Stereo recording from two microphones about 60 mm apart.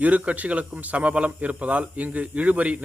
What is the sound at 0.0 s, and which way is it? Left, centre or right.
Speech, right.